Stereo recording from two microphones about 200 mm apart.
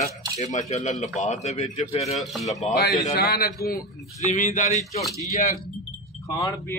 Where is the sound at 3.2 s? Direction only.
50° left (ahead or behind).